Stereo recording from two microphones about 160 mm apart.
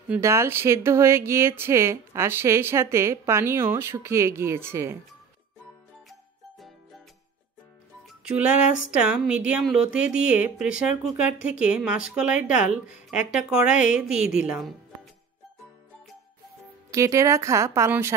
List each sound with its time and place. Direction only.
0.1 s speech: 15° right (ahead or behind)
8.1 s speech: 5° right (ahead or behind)
16.9 s a woman's voice: 20° right (ahead or behind)